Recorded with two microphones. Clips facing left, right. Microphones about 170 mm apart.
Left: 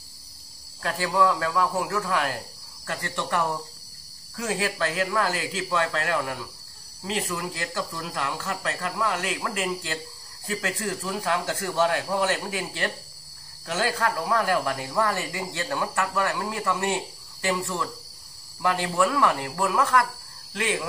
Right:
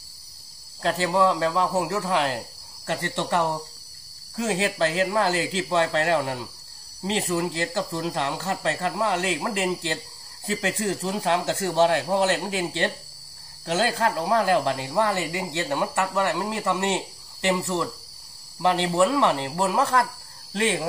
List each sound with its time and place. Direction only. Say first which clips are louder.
0.8 s speech: right 2 dB; 25° right (ahead or behind)